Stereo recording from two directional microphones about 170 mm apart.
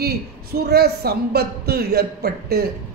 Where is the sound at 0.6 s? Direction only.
70° right (ahead or behind).